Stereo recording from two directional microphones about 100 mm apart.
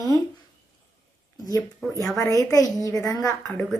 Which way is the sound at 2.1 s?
35° left (ahead or behind).